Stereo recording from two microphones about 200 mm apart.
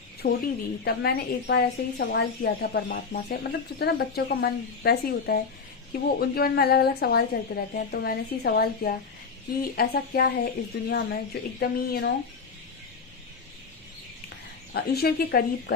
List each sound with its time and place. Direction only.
0.2 s a woman's voice: 45° left (ahead or behind)
14.7 s a woman's voice: 50° left (ahead or behind)